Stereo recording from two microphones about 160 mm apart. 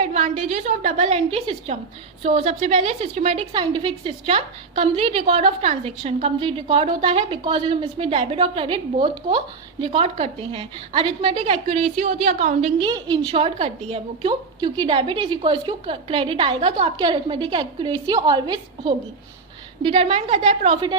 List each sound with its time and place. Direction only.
0.0 s a woman's voice: 40° right (ahead or behind)
3.5 s a woman's voice: 30° right (ahead or behind)
11.5 s a woman's voice: 40° right (ahead or behind)
12.8 s a woman's voice: 30° right (ahead or behind)
20.5 s a woman's voice: 50° right (ahead or behind)